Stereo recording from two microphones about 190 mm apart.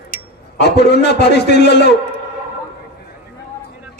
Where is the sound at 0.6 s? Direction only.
60° left (ahead or behind).